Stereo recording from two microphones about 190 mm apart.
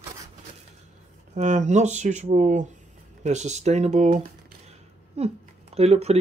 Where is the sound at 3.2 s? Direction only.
35° right (ahead or behind).